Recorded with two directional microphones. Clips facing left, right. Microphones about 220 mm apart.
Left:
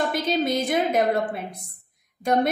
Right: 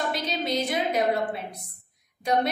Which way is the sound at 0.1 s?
50° left (ahead or behind).